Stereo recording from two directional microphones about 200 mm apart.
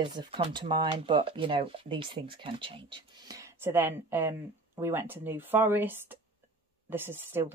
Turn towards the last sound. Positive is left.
turn(degrees=-10)  # may be behind; listen again after turning